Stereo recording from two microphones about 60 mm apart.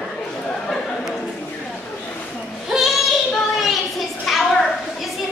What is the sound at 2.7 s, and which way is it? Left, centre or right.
Child singing, centre.